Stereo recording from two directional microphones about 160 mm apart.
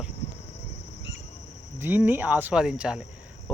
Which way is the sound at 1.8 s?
10° right (ahead or behind).